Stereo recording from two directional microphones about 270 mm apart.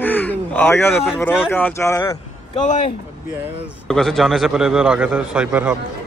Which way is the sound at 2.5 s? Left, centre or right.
Left.